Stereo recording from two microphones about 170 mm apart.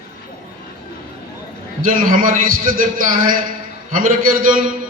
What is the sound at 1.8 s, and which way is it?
A man's voice, 55° right (ahead or behind).